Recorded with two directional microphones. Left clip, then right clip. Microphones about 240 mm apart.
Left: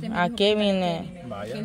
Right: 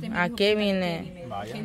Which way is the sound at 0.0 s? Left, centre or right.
Centre.